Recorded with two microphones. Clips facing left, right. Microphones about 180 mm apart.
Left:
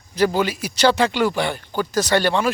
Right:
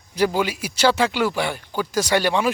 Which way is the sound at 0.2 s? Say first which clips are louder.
Left 2 dB; 10° right (ahead or behind).